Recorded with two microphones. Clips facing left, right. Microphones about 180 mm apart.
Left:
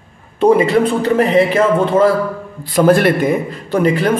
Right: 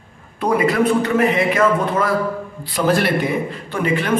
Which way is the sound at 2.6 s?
50° left (ahead or behind).